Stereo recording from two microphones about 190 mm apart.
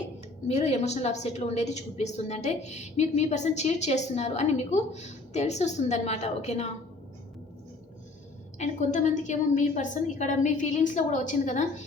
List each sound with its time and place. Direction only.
0.4 s a woman's voice: 35° left (ahead or behind)
8.5 s a woman's voice: 35° left (ahead or behind)